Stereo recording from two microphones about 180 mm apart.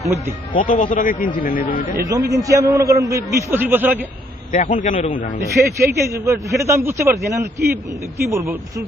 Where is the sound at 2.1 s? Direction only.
20° right (ahead or behind).